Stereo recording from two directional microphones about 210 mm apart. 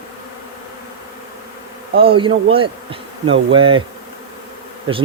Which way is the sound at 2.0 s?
25° right (ahead or behind).